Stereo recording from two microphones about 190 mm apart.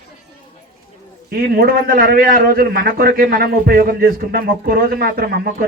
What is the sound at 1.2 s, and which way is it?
A man's voice, 50° right (ahead or behind).